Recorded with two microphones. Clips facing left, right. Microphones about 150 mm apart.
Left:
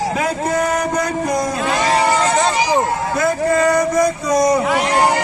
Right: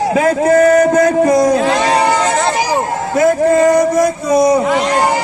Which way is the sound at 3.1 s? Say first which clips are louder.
Right 7 dB; 40° right (ahead or behind).